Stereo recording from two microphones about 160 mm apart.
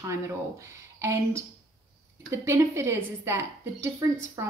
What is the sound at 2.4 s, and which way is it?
Speech, 15° right (ahead or behind).